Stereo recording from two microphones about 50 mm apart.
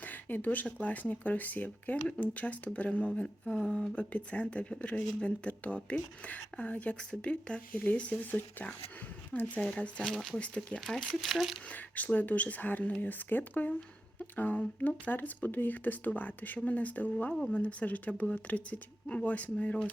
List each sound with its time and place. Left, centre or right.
0.0 s speech: left
9.3 s speech: left
10.0 s speech: centre
10.3 s speech: left
10.8 s speech: centre
11.7 s speech: left